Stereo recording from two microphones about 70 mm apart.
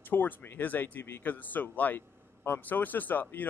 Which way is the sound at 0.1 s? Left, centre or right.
Left.